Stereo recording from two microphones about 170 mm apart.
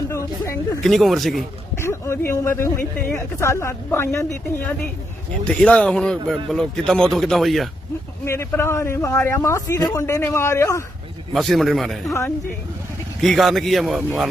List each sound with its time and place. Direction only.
0.1 s a sound: 15° left (ahead or behind)
0.8 s a man's voice: centre (ahead or behind)
1.8 s a man's voice: 15° left (ahead or behind); by 7.7 s centre (ahead or behind)
8.2 s speech: 15° left (ahead or behind)
11.3 s a man's voice: centre (ahead or behind)
13.2 s a man's voice: centre (ahead or behind)